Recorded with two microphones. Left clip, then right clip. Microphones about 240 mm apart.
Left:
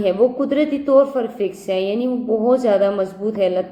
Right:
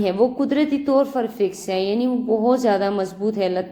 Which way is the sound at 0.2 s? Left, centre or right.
Right.